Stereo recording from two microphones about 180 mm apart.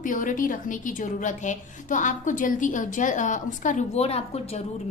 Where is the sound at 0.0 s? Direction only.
45° left (ahead or behind).